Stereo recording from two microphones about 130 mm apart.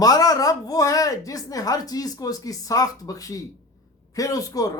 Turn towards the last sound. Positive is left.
turn(degrees=30)  # may be behind; listen again after turning